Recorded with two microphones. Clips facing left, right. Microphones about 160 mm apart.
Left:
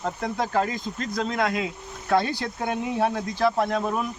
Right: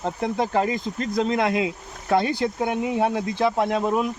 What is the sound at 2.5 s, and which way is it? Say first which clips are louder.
Speech: right 3 dB; 5° right (ahead or behind).